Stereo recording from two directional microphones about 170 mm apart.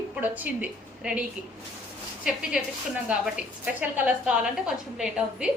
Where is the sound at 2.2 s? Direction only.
5° right (ahead or behind).